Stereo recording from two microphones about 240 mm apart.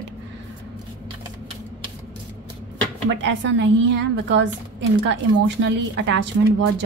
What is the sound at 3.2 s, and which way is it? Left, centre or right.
A woman's voice, right.